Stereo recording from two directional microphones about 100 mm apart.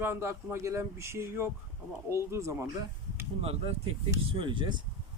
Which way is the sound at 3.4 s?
85° right.